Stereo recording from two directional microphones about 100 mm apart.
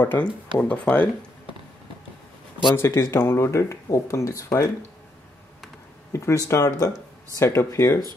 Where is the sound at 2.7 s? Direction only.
30° left (ahead or behind).